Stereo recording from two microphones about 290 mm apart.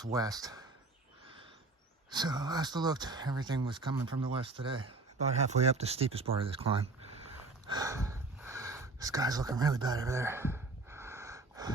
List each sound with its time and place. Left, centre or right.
0.0 s speech: centre
2.0 s speech: centre
7.7 s a sound: centre